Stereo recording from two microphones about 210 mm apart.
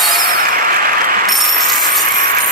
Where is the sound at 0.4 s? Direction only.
40° right (ahead or behind).